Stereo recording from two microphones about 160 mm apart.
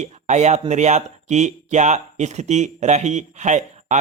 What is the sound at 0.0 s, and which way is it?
Speech, 45° right (ahead or behind).